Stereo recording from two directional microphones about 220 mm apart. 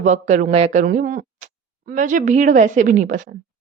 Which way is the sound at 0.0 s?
35° right (ahead or behind).